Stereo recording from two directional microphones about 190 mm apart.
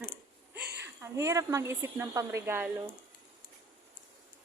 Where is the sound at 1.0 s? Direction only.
15° right (ahead or behind).